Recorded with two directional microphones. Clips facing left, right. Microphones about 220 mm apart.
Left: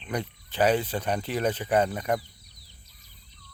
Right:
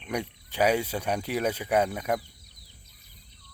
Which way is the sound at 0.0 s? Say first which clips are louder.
Even; 10° right (ahead or behind).